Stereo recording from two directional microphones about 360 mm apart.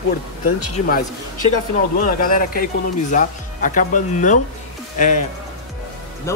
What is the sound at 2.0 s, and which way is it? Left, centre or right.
Speech, left.